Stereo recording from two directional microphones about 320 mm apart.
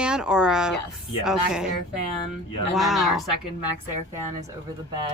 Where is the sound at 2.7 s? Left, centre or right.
Centre.